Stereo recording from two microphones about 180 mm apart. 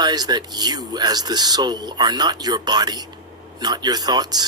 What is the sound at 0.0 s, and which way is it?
Speech, 20° right (ahead or behind).